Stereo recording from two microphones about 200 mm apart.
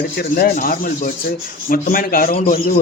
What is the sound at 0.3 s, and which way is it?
A man's voice, 45° left (ahead or behind).